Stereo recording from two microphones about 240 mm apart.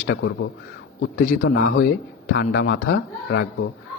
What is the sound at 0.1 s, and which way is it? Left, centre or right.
Speech, left.